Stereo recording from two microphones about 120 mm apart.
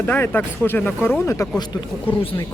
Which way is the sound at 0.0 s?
15° left (ahead or behind).